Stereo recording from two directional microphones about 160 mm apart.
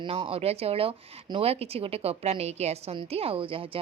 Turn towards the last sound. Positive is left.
turn(degrees=-35)  # may be behind; listen again after turning